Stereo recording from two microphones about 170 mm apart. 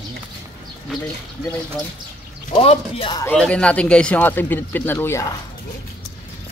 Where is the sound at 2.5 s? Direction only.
35° left (ahead or behind).